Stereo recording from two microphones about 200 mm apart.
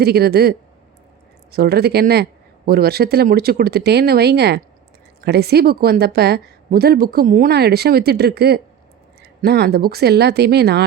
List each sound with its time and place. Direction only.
0.0 s a woman's voice: 50° right (ahead or behind)